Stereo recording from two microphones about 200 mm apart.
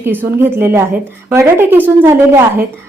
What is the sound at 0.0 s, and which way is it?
A woman's voice, 10° right (ahead or behind).